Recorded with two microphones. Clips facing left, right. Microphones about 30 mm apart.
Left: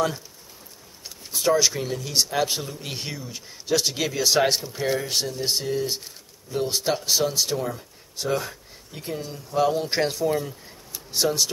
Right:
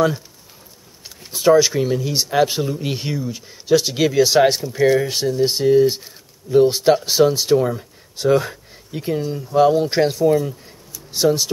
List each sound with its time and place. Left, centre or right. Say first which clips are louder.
1.0 s speech: right 7 dB; centre